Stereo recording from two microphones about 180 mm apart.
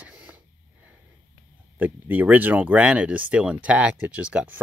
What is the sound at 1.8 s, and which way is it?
Speech, 10° right (ahead or behind).